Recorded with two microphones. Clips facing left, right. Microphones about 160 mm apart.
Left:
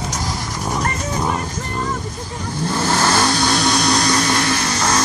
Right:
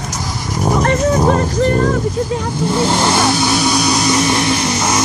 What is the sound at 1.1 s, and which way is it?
Speech, 35° right (ahead or behind).